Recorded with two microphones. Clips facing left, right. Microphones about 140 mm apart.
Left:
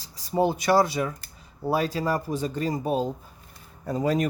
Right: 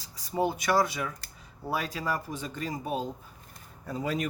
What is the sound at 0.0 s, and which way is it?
Speech, 30° left (ahead or behind).